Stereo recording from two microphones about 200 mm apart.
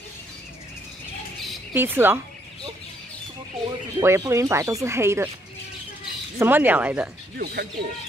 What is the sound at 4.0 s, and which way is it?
Speech, 15° right (ahead or behind).